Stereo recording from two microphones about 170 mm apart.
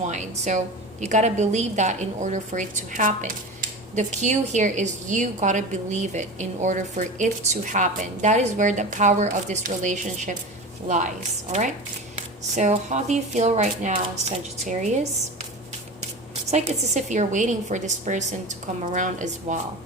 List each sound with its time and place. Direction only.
0.0 s a woman's voice: 45° right (ahead or behind)
12.1 s a woman's voice: 40° right (ahead or behind)
16.5 s a woman's voice: 40° right (ahead or behind)